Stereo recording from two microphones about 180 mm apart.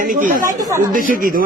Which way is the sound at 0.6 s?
20° right (ahead or behind).